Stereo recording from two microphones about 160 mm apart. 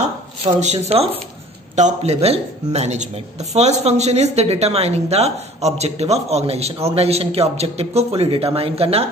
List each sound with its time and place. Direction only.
0.6 s speech: 45° right (ahead or behind)